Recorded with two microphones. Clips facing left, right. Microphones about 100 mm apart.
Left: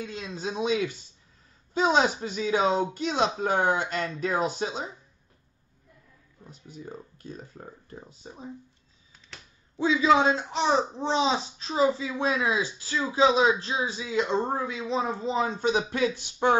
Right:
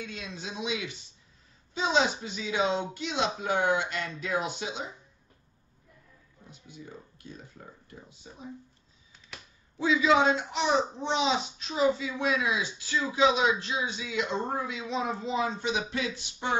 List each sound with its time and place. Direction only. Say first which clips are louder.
0.0 s a man's voice: left 5 dB; 35° left (ahead or behind)
6.5 s a man's voice: left 5 dB; 40° left (ahead or behind)
9.8 s a man's voice: left 2 dB; 30° left (ahead or behind)